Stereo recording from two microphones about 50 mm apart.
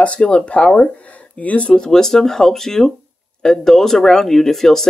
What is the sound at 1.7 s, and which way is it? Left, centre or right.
Speech, centre.